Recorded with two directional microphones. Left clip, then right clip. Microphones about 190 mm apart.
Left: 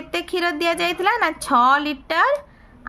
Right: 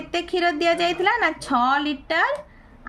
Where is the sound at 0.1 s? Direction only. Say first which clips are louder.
Even; 30° left (ahead or behind).